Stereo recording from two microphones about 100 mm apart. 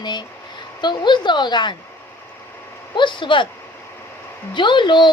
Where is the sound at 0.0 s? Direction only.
45° left (ahead or behind).